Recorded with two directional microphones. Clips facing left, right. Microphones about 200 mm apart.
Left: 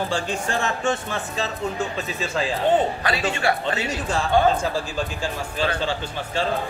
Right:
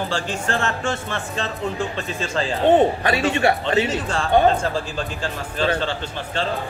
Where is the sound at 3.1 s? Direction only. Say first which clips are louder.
Right 4 dB; 25° right (ahead or behind).